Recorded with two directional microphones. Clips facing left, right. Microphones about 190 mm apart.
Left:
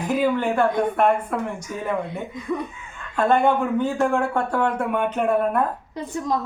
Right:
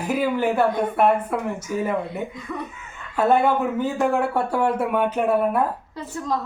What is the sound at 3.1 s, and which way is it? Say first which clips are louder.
Speech: even; 5° right (ahead or behind).